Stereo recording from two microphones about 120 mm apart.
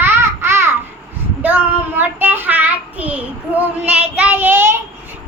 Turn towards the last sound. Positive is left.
turn(degrees=-20)  # may be behind; listen again after turning